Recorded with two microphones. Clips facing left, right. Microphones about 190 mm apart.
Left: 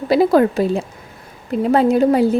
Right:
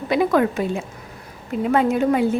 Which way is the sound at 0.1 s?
35° left (ahead or behind).